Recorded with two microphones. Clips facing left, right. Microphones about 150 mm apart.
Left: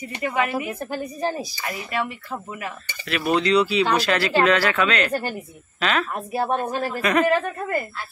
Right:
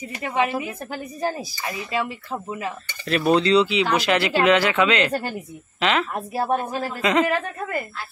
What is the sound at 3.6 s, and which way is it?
Speech, 20° right (ahead or behind).